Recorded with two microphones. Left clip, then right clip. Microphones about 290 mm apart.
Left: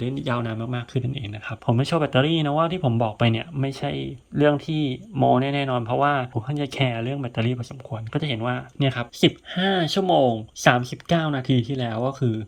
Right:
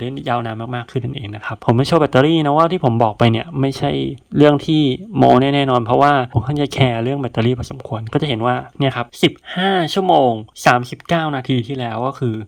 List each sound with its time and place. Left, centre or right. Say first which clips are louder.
0.0 s speech: right 6 dB; centre